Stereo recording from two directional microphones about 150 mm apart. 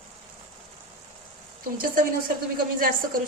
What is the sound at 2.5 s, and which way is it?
Speech, 70° right (ahead or behind).